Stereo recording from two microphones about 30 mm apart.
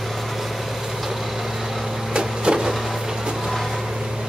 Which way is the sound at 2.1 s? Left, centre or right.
Right.